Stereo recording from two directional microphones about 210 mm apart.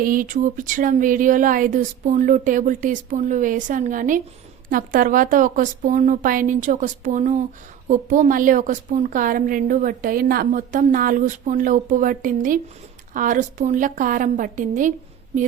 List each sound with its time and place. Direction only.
0.0 s a woman's voice: 40° right (ahead or behind)